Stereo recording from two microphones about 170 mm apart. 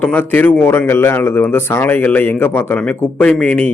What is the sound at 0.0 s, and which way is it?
Speech, 10° left (ahead or behind).